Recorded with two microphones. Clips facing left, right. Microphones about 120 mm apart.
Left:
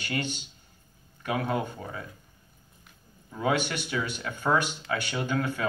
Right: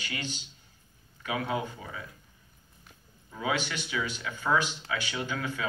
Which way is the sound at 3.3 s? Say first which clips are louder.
Left 4 dB; 50° left (ahead or behind).